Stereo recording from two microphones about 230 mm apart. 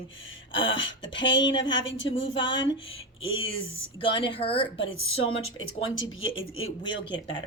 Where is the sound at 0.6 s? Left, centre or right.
Left.